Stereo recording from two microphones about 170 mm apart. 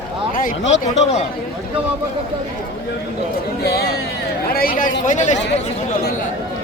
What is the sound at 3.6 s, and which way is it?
Speech, 65° left (ahead or behind).